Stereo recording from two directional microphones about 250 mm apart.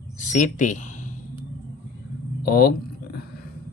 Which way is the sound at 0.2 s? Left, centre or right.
Left.